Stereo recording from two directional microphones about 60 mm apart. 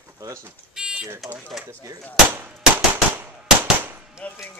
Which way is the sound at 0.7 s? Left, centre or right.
Centre.